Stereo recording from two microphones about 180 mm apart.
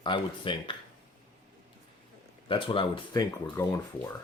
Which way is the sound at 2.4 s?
30° left (ahead or behind).